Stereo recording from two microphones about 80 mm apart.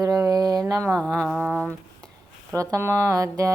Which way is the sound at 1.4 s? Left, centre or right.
Centre.